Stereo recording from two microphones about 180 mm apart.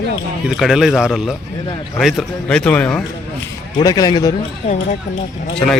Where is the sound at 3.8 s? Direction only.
20° left (ahead or behind).